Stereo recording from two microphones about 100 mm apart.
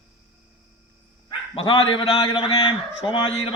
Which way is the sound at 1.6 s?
65° left (ahead or behind).